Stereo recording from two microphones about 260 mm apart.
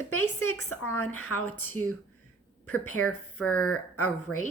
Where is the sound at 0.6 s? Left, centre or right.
Left.